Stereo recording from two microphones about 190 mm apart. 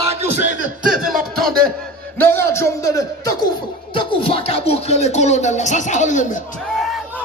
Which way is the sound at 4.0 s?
30° left (ahead or behind).